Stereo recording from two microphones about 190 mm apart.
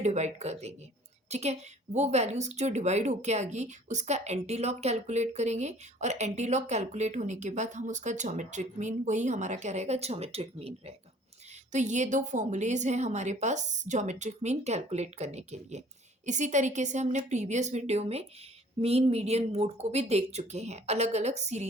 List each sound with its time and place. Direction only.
0.0 s a woman's voice: 35° right (ahead or behind)